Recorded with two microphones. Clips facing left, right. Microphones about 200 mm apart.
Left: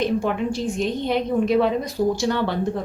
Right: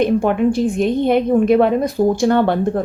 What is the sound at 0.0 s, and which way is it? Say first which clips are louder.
A woman's voice: right 7 dB; 55° right (ahead or behind).